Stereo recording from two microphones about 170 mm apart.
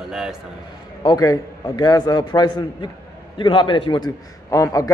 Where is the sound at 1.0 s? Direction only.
20° left (ahead or behind).